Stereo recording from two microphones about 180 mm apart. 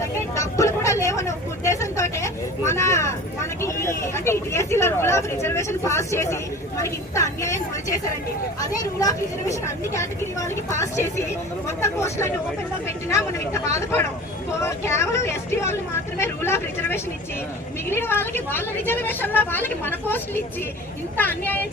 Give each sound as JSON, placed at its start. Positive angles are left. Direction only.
{"t": 0.0, "sound": "vehicle", "side_deg": 15}
{"t": 3.6, "sound": "a woman's voice", "side_deg": 15}